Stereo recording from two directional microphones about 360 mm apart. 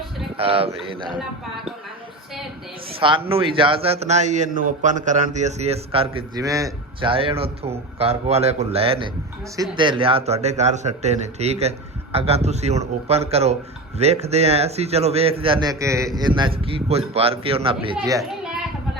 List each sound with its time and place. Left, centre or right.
0.3 s a man's voice: centre
3.0 s a man's voice: centre